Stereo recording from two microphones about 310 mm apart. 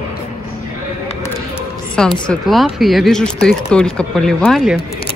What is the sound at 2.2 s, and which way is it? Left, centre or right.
Speech, centre.